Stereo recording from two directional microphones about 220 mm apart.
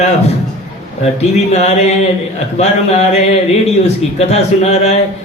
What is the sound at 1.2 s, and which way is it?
A man's voice, 30° left (ahead or behind).